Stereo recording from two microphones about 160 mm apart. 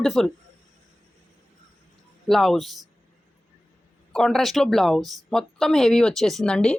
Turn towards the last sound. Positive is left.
turn(degrees=5)  # may be behind; listen again after turning